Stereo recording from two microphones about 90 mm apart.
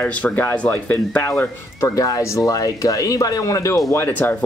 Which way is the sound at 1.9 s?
40° left (ahead or behind).